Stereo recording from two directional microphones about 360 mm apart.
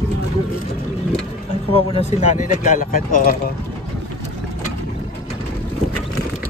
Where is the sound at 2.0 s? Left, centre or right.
Centre.